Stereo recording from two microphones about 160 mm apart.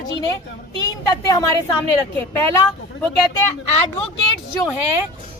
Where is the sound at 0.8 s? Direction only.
25° left (ahead or behind).